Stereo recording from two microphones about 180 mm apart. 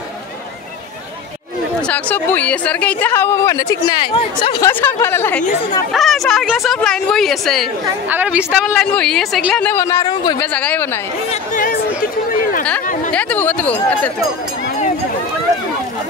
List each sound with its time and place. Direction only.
1.8 s speech: 5° left (ahead or behind)
5.9 s a woman's voice: centre (ahead or behind)
8.6 s speech: 5° left (ahead or behind)
11.5 s chatter: 50° left (ahead or behind)
13.1 s speech: 5° left (ahead or behind)